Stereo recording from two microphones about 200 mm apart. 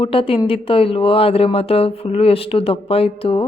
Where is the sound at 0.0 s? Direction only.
25° left (ahead or behind).